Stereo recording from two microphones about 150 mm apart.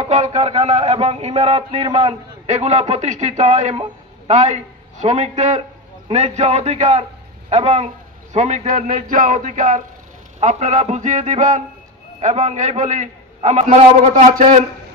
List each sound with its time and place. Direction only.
0.0 s a man's voice: 50° right (ahead or behind)